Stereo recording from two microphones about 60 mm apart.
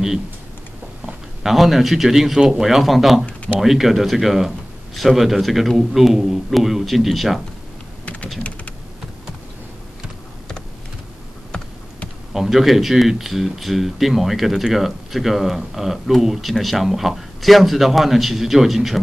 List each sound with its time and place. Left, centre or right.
1.0 s speech: centre
8.0 s typing: left
12.4 s speech: centre